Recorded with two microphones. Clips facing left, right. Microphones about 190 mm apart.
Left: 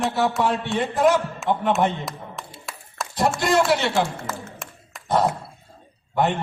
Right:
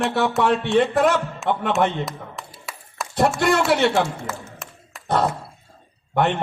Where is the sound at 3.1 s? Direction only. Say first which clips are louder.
Right 2 dB; 60° right (ahead or behind).